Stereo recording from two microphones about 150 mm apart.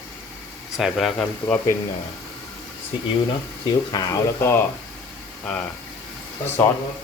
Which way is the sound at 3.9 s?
25° left (ahead or behind).